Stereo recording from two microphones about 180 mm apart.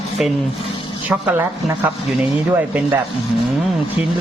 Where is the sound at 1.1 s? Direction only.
10° right (ahead or behind).